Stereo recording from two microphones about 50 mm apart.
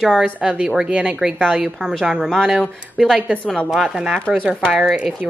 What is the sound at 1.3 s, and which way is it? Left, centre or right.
Speech, centre.